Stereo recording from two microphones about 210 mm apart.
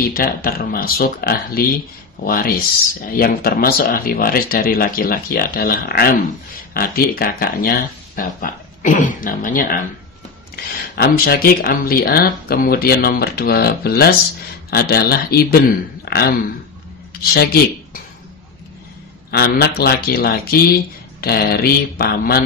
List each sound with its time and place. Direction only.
0.0 s speech: 45° left (ahead or behind)
19.3 s speech: 45° left (ahead or behind)